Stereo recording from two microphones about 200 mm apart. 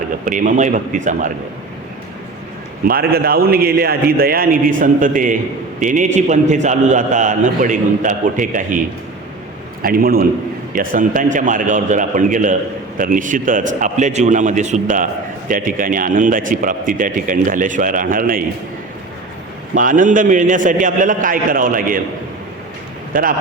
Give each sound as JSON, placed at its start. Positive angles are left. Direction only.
{"t": 0.3, "sound": "a man's voice", "side_deg": -40}
{"t": 2.8, "sound": "a man's voice", "side_deg": -50}
{"t": 9.8, "sound": "a man's voice", "side_deg": -45}
{"t": 19.7, "sound": "a man's voice", "side_deg": -40}